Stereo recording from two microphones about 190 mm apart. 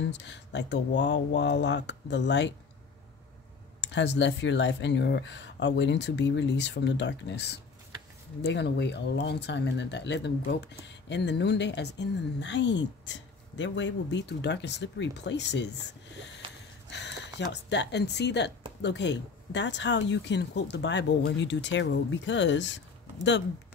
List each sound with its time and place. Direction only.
0.1 s speech: 65° left (ahead or behind)
3.8 s speech: 65° left (ahead or behind)
16.4 s gasp: 25° right (ahead or behind)
16.9 s speech: 65° left (ahead or behind)